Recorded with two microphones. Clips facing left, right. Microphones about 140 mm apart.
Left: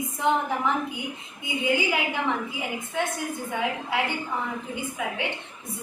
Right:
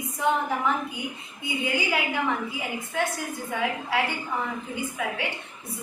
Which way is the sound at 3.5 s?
20° left (ahead or behind).